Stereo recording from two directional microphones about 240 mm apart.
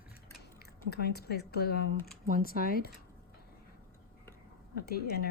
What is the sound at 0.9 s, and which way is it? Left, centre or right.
A woman's voice, left.